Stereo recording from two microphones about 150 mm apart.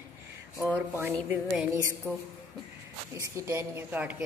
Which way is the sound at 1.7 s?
20° right (ahead or behind).